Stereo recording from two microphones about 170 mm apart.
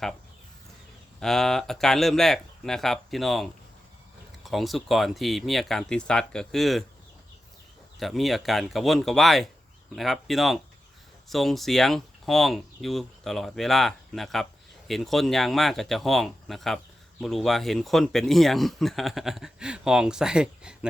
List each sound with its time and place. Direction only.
1.2 s speech: centre (ahead or behind)
7.9 s speech: centre (ahead or behind)